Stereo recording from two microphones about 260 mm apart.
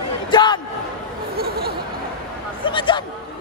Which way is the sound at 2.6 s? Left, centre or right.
Centre.